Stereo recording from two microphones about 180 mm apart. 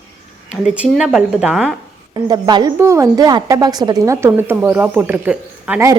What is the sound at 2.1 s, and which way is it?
Speech, 25° right (ahead or behind).